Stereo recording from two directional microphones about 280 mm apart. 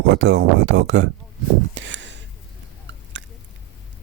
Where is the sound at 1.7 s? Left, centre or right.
Right.